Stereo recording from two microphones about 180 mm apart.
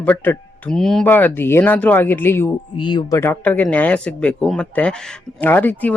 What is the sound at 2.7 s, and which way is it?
Speech, 25° left (ahead or behind).